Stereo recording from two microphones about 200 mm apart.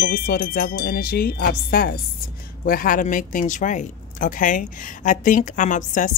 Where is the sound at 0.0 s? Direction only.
50° left (ahead or behind).